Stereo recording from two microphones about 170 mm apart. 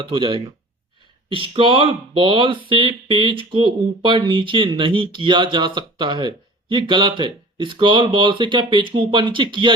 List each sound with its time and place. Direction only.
0.0 s speech: 30° right (ahead or behind)